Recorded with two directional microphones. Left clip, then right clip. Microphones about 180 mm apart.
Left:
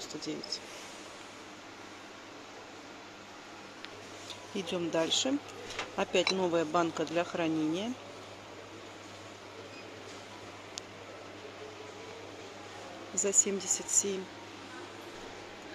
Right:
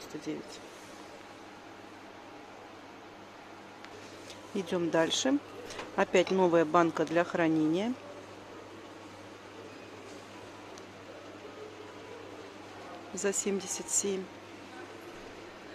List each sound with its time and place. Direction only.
4.6 s speech: 10° right (ahead or behind)
13.1 s speech: 10° right (ahead or behind)